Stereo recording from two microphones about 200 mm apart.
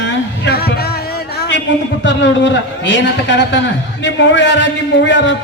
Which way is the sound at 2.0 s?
65° left (ahead or behind).